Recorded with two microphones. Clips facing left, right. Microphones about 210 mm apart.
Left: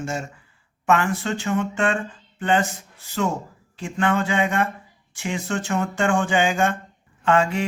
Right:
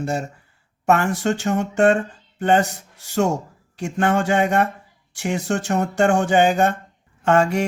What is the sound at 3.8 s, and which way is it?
Speech, 45° right (ahead or behind).